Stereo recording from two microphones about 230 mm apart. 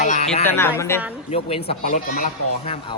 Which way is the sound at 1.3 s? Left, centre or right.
Left.